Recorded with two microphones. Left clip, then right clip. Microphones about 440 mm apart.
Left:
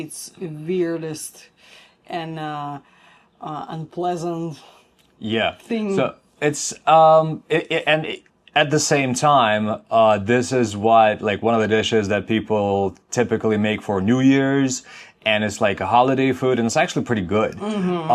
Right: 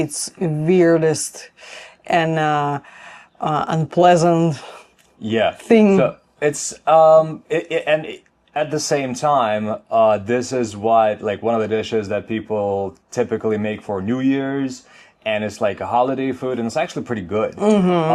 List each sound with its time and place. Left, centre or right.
0.0 s speech: right
5.2 s speech: centre
5.6 s speech: right
6.0 s speech: centre
17.6 s speech: right